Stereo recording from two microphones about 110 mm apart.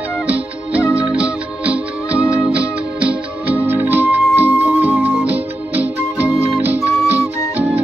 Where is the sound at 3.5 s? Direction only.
20° right (ahead or behind).